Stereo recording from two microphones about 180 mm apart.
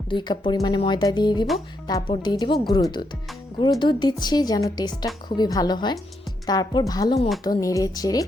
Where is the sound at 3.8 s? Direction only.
25° left (ahead or behind).